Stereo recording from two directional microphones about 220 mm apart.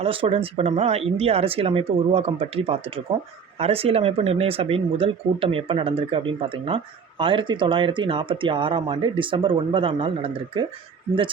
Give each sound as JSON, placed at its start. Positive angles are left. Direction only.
{"t": 0.0, "sound": "speech", "side_deg": -25}